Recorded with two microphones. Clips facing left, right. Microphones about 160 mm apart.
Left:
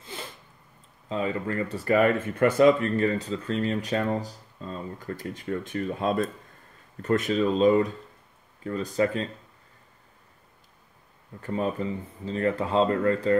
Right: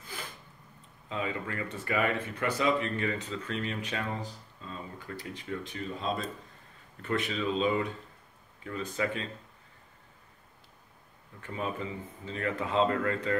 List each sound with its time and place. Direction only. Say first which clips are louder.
0.0 s a sound: left 4 dB; 25° left (ahead or behind)
1.0 s speech: left 6 dB; 35° left (ahead or behind); by 6.3 s 55° left (ahead or behind)
7.0 s speech: left 8 dB; 40° left (ahead or behind)
11.4 s speech: left 7 dB; 40° left (ahead or behind)